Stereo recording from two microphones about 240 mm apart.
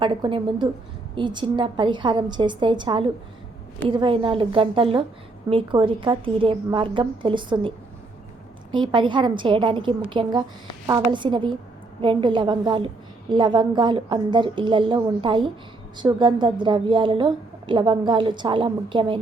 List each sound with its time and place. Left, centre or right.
0.0 s a woman's voice: centre
8.7 s a woman's voice: centre